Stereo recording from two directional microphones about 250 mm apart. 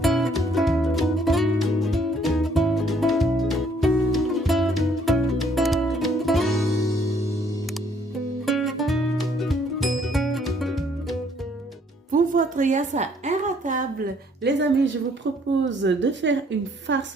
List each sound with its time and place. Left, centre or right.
0.0 s music: centre
6.7 s music: centre
7.1 s music: centre
8.4 s music: centre
12.1 s a sound: right
14.4 s a woman's voice: right
15.8 s a woman's voice: right